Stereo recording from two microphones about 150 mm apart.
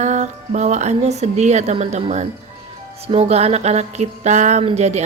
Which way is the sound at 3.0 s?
45° right (ahead or behind).